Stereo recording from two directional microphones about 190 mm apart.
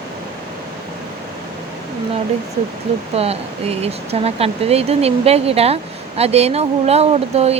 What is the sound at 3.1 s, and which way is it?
Speech, 30° right (ahead or behind).